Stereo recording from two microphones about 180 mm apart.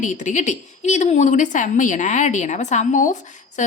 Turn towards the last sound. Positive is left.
turn(degrees=45)  # may be behind; listen again after turning